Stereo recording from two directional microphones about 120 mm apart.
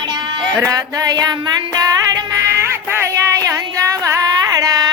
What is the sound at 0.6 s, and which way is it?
Music, 30° right (ahead or behind).